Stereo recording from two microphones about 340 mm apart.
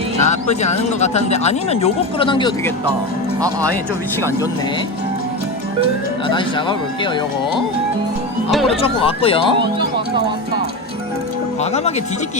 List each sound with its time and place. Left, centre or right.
0.2 s speech: centre
4.2 s speech: centre
6.2 s speech: centre
8.4 s speech: centre
8.8 s speech: centre
11.6 s speech: centre